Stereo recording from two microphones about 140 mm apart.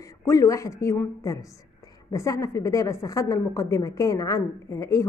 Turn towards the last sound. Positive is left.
turn(degrees=20)  # may be behind; listen again after turning